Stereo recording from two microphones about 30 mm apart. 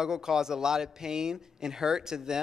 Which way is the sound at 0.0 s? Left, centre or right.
Centre.